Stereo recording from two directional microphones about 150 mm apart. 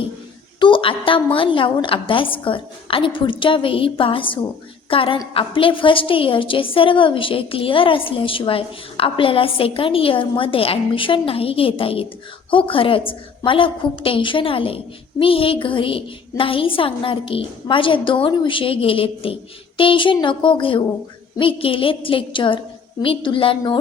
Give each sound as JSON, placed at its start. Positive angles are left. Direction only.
{"t": 0.6, "sound": "a woman's voice", "side_deg": 35}